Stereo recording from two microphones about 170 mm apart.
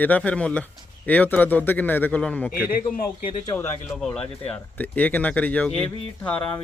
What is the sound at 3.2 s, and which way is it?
Speech, 30° left (ahead or behind).